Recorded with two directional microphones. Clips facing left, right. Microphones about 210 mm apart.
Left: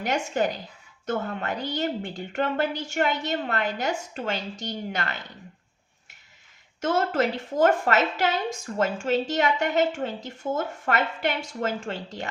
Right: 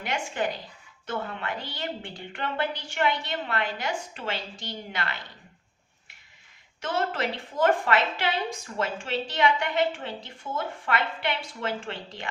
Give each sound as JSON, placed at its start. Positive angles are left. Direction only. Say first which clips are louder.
{"t": 0.0, "sound": "a woman's voice", "louder": "left 4 dB", "side_deg": 45}
{"t": 6.8, "sound": "a woman's voice", "louder": "left 5 dB", "side_deg": 45}